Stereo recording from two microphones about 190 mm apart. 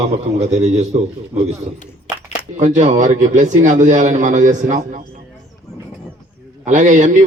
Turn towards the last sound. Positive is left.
turn(degrees=-40)  # may be behind; listen again after turning